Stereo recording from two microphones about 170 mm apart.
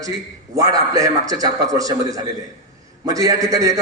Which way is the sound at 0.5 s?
20° right (ahead or behind).